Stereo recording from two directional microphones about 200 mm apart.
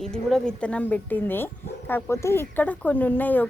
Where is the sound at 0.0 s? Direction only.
Centre (ahead or behind).